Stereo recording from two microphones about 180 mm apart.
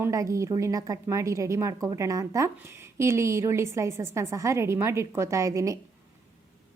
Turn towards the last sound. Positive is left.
turn(degrees=-20)  # may be behind; listen again after turning